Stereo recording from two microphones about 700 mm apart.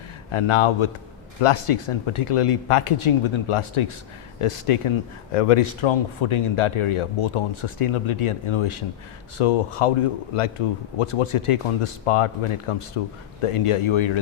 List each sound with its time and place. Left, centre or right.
0.3 s speech: left
10.9 s speech: left